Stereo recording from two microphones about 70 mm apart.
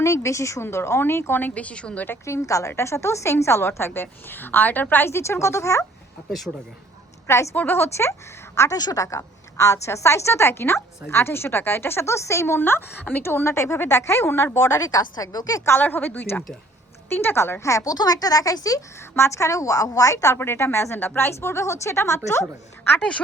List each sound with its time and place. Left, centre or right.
0.0 s a woman's voice: left; by 2.0 s centre
2.2 s a woman's voice: left
6.5 s speech: centre
7.3 s a woman's voice: left
7.5 s a woman's voice: left
8.8 s a woman's voice: left
14.8 s speech: left
15.8 s a woman's voice: left
17.9 s speech: left
19.1 s a woman's voice: left